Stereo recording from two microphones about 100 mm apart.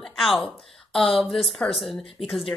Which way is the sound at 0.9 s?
65° left (ahead or behind).